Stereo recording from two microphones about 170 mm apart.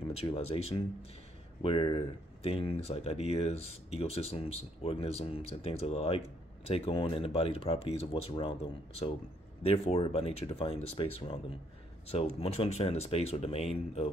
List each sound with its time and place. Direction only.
0.1 s speech: 35° left (ahead or behind)
9.6 s speech: 35° left (ahead or behind)